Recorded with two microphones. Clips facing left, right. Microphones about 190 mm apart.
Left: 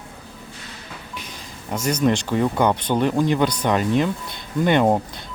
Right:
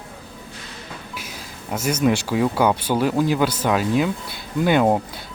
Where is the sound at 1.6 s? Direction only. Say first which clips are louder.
Even; 5° right (ahead or behind).